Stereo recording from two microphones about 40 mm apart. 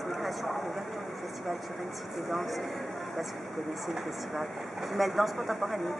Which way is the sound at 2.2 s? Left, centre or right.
Centre.